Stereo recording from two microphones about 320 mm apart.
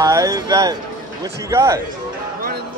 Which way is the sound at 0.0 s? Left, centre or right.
Centre.